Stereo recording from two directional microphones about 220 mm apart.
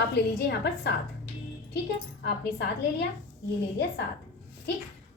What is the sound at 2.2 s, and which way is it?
Speech, 50° left (ahead or behind).